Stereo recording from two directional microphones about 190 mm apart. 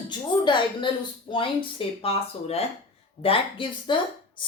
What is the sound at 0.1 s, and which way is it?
Speech, 25° left (ahead or behind).